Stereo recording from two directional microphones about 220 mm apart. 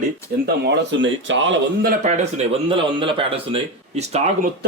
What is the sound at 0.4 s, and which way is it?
Speech, 50° right (ahead or behind).